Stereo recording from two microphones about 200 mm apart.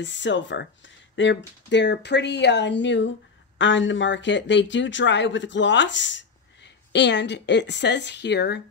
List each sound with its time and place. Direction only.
0.0 s speech: 65° left (ahead or behind)